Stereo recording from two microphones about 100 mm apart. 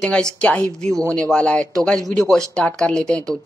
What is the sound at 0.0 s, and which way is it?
Speech, 10° left (ahead or behind).